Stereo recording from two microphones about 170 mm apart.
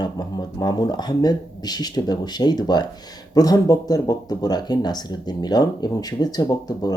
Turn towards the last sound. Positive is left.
turn(degrees=25)  # may be behind; listen again after turning